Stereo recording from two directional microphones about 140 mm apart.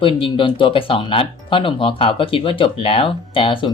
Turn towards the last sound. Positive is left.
turn(degrees=35)  # may be behind; listen again after turning